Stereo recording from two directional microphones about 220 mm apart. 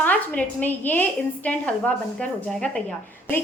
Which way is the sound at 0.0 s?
5° left (ahead or behind).